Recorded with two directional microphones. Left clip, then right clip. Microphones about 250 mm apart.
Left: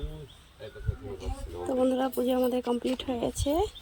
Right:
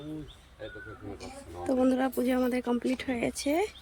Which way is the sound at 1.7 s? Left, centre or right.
Centre.